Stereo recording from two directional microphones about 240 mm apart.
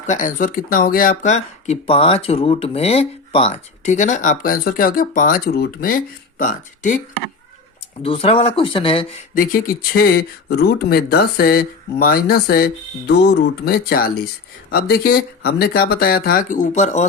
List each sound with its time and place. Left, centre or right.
0.1 s speech: left
8.0 s speech: left
9.3 s speech: left